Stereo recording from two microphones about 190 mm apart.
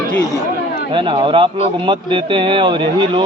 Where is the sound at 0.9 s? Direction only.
25° right (ahead or behind).